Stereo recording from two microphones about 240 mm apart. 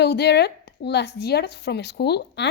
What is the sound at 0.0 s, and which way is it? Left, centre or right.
A woman's voice, left.